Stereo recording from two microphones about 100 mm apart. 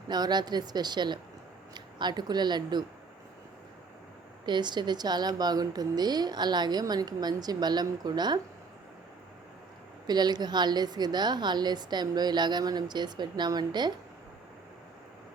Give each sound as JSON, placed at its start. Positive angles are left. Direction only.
{"t": 0.1, "sound": "a woman's voice", "side_deg": -45}
{"t": 4.4, "sound": "a woman's voice", "side_deg": -50}
{"t": 10.1, "sound": "a woman's voice", "side_deg": -45}